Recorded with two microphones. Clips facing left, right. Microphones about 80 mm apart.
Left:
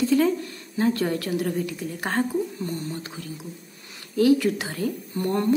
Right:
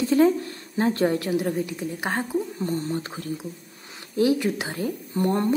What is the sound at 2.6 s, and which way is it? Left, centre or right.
Speech, right.